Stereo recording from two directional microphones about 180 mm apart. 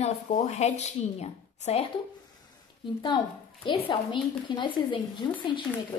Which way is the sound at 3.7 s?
30° left (ahead or behind).